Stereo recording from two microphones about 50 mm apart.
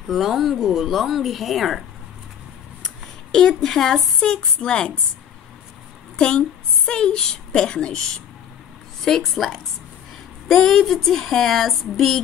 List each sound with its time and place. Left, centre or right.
0.1 s speech: centre
2.8 s speech: centre
6.1 s a woman's voice: centre
9.0 s speech: centre